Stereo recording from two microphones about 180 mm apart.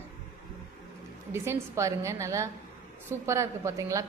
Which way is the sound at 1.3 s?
15° right (ahead or behind).